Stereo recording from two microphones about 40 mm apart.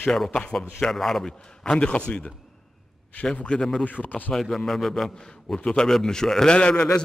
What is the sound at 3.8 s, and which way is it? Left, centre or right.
Speech, left.